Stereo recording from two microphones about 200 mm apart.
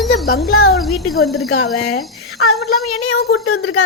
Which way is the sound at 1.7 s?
Centre (ahead or behind).